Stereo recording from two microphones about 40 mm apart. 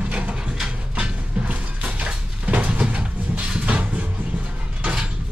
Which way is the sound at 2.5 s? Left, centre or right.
Right.